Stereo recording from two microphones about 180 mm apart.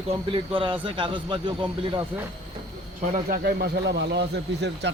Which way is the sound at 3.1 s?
60° right (ahead or behind).